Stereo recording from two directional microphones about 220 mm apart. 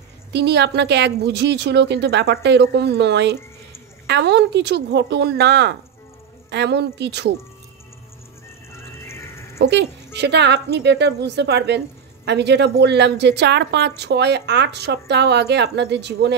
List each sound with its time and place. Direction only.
0.3 s a woman's voice: 50° right (ahead or behind)
8.7 s a sound: 10° left (ahead or behind)
9.6 s a woman's voice: 50° right (ahead or behind)